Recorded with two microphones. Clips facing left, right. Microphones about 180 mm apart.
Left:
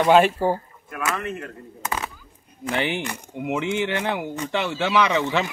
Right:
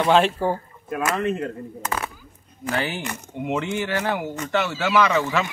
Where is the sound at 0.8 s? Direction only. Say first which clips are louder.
Right 5 dB; 20° right (ahead or behind).